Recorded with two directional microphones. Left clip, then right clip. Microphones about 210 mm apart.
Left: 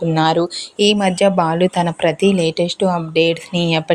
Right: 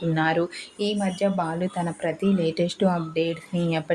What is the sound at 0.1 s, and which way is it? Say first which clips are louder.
Speech: left 7 dB; 25° left (ahead or behind).